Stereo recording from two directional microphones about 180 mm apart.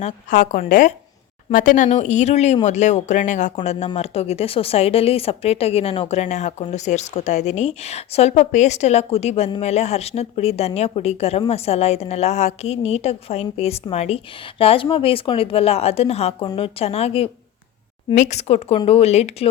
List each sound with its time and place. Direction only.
0.0 s a woman's voice: 50° left (ahead or behind)